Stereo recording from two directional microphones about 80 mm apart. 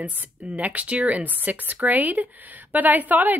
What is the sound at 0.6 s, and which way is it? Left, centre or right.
Speech, centre.